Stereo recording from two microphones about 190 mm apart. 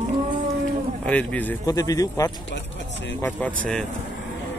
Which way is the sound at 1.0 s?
5° left (ahead or behind).